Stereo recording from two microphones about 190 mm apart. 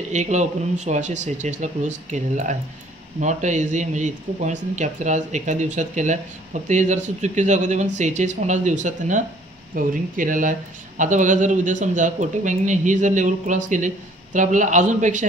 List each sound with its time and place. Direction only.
0.1 s speech: 40° right (ahead or behind)